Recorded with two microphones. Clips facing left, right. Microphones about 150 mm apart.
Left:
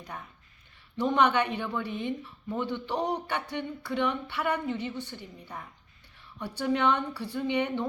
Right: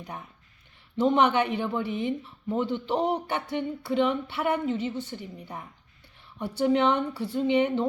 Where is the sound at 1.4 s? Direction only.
10° right (ahead or behind).